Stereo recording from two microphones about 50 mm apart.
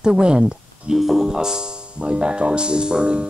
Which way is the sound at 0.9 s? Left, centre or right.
Centre.